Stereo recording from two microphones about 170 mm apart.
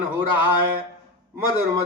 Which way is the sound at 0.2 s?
15° right (ahead or behind).